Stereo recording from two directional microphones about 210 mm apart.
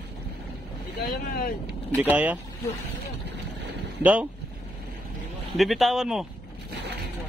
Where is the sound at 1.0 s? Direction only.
45° left (ahead or behind).